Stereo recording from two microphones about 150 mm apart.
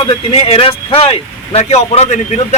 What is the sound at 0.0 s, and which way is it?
Speech, 40° left (ahead or behind).